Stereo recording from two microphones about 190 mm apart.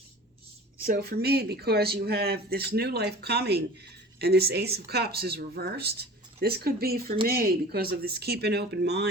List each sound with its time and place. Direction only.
0.9 s speech: 55° right (ahead or behind)